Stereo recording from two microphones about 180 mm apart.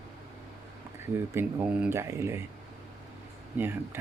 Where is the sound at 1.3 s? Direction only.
15° right (ahead or behind).